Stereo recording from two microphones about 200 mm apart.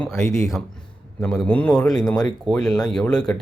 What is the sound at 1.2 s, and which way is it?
Speech, 5° left (ahead or behind).